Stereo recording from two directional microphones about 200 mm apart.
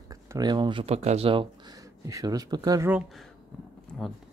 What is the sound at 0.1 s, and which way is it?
Speech, 20° right (ahead or behind).